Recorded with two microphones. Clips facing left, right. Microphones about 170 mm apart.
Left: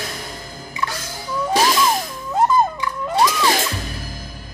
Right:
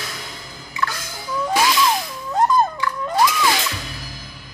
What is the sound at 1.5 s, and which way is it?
Music, 45° left (ahead or behind).